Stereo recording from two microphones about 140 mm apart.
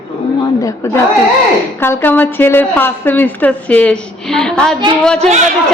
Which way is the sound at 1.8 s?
15° left (ahead or behind).